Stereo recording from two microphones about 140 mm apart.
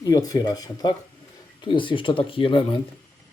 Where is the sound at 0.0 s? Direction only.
25° left (ahead or behind).